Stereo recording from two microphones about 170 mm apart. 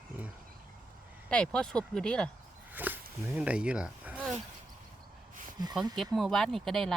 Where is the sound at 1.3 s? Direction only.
5° left (ahead or behind).